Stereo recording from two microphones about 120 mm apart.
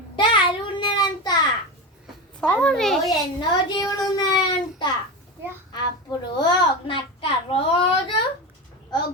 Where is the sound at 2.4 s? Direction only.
10° left (ahead or behind).